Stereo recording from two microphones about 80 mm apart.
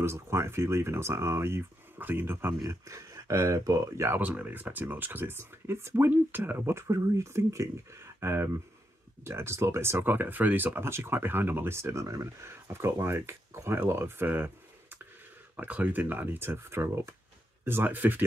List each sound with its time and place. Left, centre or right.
0.0 s speech: right
4.2 s speech: right